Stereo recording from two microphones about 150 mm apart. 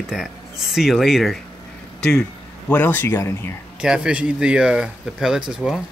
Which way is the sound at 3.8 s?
5° right (ahead or behind).